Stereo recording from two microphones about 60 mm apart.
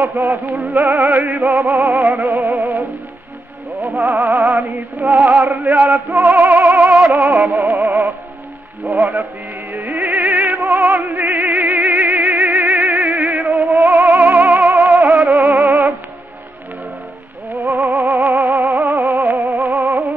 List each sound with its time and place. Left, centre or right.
0.1 s music: right
0.6 s music: right
1.7 s music: right
3.8 s music: right
6.9 s music: centre
7.2 s music: right
9.7 s music: right
17.6 s music: right
19.4 s music: right
19.7 s music: right